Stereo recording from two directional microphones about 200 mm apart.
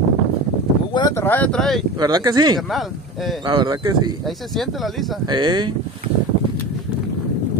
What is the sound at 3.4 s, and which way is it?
Speech, 20° right (ahead or behind).